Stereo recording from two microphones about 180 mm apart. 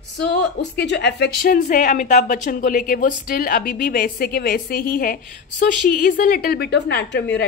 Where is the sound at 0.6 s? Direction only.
70° left (ahead or behind).